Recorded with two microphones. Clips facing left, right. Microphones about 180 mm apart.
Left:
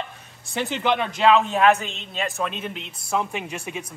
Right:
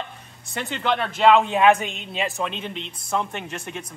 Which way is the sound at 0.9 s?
5° left (ahead or behind).